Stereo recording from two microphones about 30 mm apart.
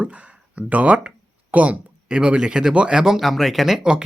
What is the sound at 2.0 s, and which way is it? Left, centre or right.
Speech, right.